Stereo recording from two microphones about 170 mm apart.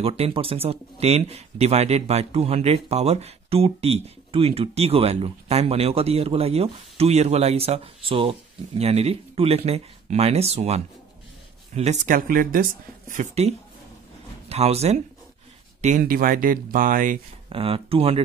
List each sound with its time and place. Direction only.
0.0 s speech: 35° right (ahead or behind); by 12.6 s 55° right (ahead or behind)
13.1 s speech: 40° right (ahead or behind)
16.0 s speech: 55° right (ahead or behind)
17.5 s speech: 30° right (ahead or behind)